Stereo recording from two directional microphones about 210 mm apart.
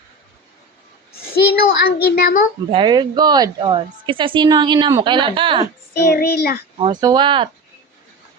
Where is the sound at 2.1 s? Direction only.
45° left (ahead or behind).